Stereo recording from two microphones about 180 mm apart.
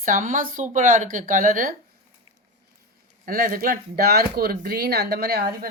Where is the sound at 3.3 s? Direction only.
55° right (ahead or behind).